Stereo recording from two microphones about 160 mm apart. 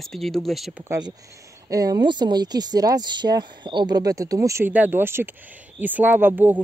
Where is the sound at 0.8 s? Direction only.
20° right (ahead or behind).